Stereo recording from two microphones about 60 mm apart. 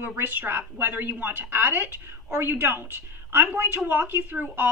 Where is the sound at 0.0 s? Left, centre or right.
Right.